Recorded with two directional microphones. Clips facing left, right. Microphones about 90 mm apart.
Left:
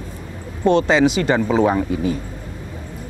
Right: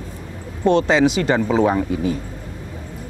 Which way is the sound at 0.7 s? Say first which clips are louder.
Even; 15° left (ahead or behind).